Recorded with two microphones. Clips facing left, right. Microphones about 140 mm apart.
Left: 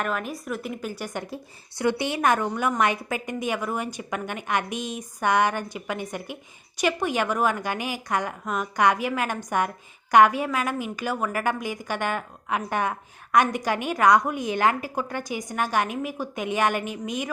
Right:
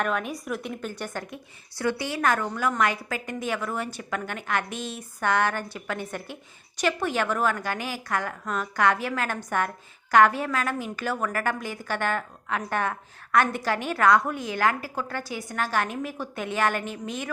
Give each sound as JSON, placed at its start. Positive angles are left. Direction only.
{"t": 0.0, "sound": "a woman's voice", "side_deg": 0}
{"t": 1.7, "sound": "a woman's voice", "side_deg": 20}